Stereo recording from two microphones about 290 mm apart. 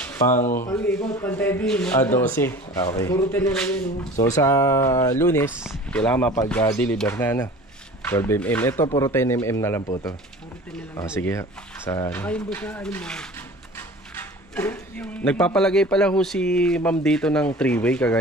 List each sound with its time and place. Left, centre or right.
0.3 s speech: left
0.7 s a man's voice: centre
11.1 s speech: centre
14.5 s a man's voice: centre